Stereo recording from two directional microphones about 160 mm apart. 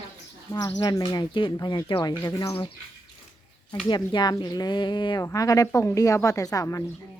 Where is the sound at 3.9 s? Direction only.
25° left (ahead or behind).